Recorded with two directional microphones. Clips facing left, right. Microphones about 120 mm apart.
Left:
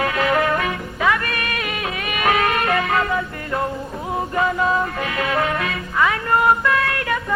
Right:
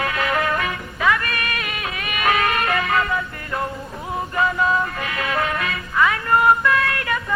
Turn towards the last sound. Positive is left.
turn(degrees=25)  # may be behind; listen again after turning